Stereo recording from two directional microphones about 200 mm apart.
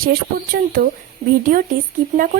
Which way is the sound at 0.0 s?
50° right (ahead or behind).